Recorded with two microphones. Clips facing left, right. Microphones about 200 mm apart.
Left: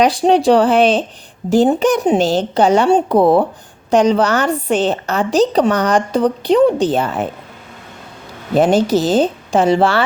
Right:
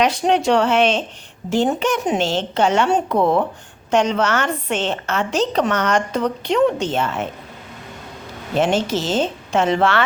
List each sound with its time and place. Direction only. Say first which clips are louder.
0.0 s a woman's voice: left 5 dB; 35° left (ahead or behind)
8.5 s a woman's voice: left 6 dB; 40° left (ahead or behind)